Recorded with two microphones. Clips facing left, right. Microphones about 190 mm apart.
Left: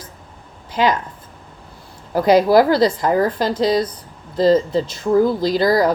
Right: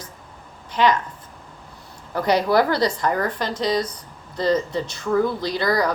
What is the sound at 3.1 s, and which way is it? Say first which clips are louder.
Speech: left 6 dB; 5° left (ahead or behind).